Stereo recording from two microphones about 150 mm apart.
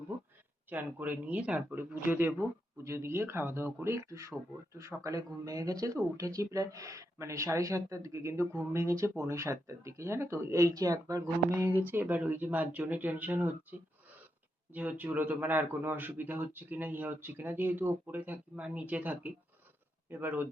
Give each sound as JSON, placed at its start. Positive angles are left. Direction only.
{"t": 0.7, "sound": "a man's voice", "side_deg": -10}